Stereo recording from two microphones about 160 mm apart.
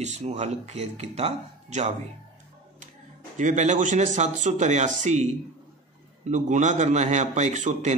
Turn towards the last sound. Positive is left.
turn(degrees=-50)  # may be behind; listen again after turning